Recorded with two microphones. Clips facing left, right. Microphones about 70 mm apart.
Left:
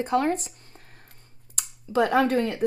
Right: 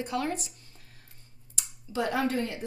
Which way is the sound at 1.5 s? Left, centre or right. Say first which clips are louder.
Left 9 dB; left.